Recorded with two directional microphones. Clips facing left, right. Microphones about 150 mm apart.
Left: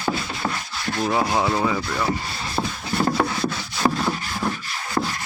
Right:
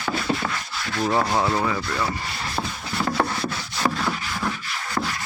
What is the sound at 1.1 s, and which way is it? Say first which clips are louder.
Speech: even; 10° left (ahead or behind).